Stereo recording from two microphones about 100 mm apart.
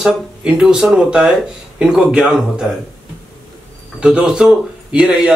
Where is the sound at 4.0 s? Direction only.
10° right (ahead or behind).